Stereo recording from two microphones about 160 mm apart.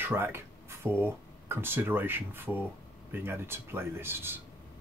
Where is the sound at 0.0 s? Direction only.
15° right (ahead or behind).